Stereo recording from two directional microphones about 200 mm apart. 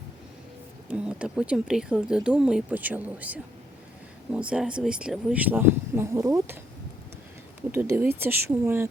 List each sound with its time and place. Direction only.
0.9 s speech: 5° right (ahead or behind)
7.7 s speech: 10° right (ahead or behind)